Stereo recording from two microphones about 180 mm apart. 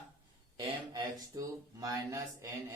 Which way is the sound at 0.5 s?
20° right (ahead or behind).